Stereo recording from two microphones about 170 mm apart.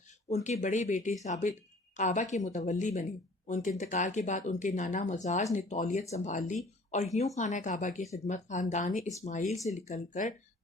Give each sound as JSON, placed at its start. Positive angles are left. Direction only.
{"t": 0.3, "sound": "speech", "side_deg": 40}